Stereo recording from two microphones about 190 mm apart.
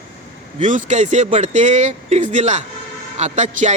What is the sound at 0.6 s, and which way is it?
A man's voice, 40° right (ahead or behind).